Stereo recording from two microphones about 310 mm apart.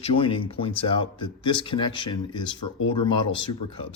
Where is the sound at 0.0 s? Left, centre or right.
Centre.